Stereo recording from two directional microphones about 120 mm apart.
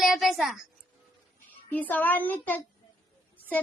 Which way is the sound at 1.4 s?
15° left (ahead or behind).